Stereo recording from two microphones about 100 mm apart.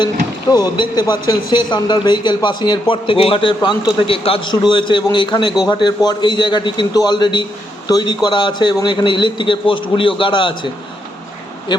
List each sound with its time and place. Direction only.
0.5 s a man's voice: 40° left (ahead or behind); by 4.4 s 65° left (ahead or behind)
4.6 s a man's voice: 50° left (ahead or behind)